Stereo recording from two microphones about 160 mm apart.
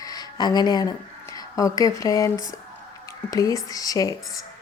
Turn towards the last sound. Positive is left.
turn(degrees=20)  # may be behind; listen again after turning